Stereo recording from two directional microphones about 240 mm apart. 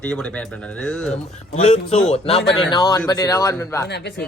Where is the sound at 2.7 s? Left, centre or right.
Centre.